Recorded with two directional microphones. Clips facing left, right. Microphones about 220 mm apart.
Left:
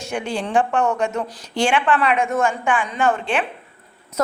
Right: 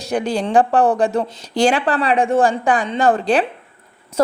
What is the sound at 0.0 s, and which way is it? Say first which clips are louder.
A woman's voice: right 5 dB; 35° right (ahead or behind).